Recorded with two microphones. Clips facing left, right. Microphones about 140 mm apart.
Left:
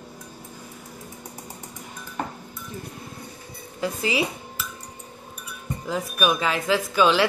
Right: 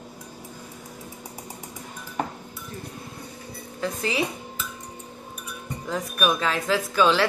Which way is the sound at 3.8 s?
5° left (ahead or behind).